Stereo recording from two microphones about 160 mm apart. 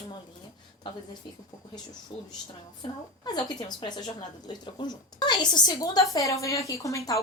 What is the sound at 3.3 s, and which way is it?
Speech, 25° left (ahead or behind).